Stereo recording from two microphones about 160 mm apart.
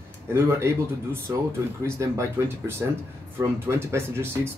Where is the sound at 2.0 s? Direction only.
20° right (ahead or behind).